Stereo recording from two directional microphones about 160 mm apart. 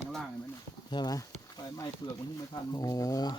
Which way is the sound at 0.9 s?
25° left (ahead or behind).